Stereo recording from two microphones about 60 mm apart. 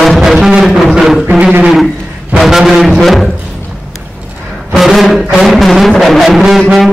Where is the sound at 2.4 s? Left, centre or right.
Centre.